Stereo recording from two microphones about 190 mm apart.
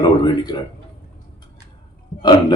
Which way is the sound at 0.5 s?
25° left (ahead or behind).